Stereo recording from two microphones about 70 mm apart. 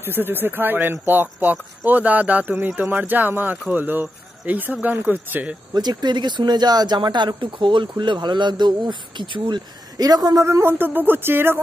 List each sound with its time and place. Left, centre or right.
0.0 s speech: right
5.8 s speech: right
9.5 s speech: right
10.4 s speech: right